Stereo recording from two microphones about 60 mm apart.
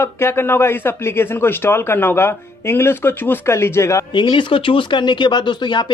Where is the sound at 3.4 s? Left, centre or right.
Left.